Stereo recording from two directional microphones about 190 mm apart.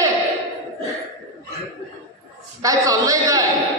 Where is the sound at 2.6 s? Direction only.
15° right (ahead or behind).